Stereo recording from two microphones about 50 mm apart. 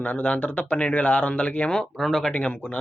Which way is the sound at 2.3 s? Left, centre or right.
Left.